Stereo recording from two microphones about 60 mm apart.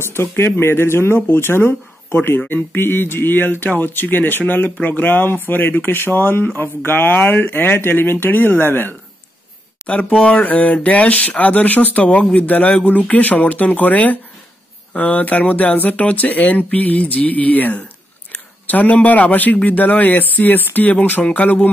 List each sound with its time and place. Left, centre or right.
0.0 s speech: left
9.8 s a man's voice: left